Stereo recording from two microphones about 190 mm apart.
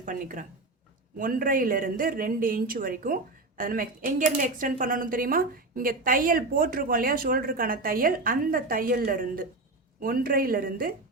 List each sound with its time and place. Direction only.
0.0 s a woman's voice: 45° right (ahead or behind)